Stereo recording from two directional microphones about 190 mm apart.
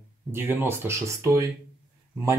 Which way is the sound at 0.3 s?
10° right (ahead or behind).